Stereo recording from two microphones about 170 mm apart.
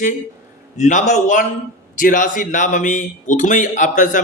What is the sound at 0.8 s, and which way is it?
A man's voice, 45° left (ahead or behind).